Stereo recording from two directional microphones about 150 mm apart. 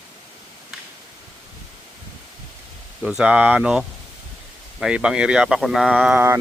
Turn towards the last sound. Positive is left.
turn(degrees=-15)  # may be behind; listen again after turning